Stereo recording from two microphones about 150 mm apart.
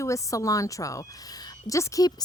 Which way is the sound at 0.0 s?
20° left (ahead or behind).